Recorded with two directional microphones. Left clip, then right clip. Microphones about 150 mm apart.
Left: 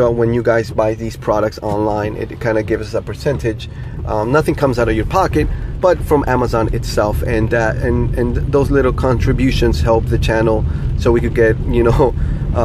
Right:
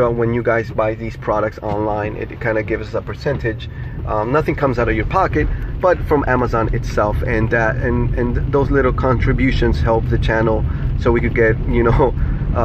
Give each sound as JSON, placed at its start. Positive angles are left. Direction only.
{"t": 0.2, "sound": "speech", "side_deg": 35}
{"t": 2.7, "sound": "speech", "side_deg": 45}
{"t": 4.1, "sound": "speech", "side_deg": 35}